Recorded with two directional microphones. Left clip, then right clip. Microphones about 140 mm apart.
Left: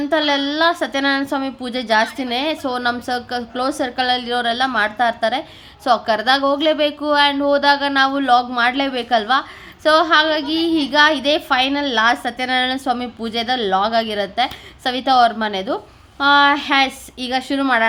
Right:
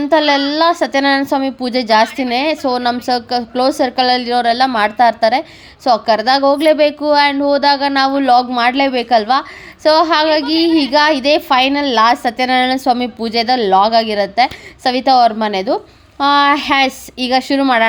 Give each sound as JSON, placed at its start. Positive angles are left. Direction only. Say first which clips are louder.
{"t": 0.0, "sound": "a woman's voice", "louder": "right 5 dB", "side_deg": -35}